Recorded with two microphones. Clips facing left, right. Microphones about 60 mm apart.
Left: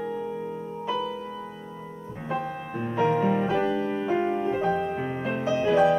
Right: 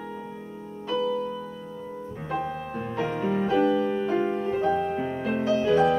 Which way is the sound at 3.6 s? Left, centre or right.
Left.